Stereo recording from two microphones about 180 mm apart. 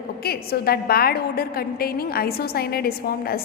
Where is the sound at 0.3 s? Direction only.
60° left (ahead or behind).